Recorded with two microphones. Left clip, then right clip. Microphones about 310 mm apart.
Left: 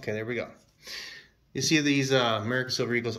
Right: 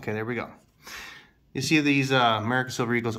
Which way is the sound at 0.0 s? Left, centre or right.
Centre.